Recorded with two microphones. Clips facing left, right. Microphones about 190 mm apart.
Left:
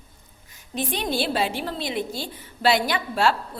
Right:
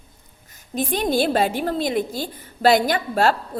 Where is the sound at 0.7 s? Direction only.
45° right (ahead or behind).